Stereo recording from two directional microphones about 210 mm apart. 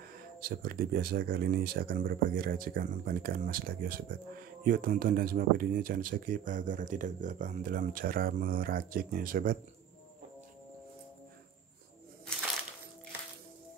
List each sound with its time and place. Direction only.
0.1 s speech: 45° right (ahead or behind)